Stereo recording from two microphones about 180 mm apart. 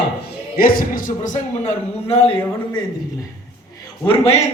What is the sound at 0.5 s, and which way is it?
Speech, 55° left (ahead or behind).